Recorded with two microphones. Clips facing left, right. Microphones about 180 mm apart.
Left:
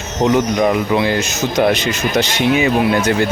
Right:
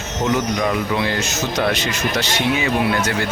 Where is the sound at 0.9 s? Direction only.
20° left (ahead or behind).